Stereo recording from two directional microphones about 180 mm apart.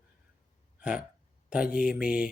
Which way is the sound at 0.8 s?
5° right (ahead or behind).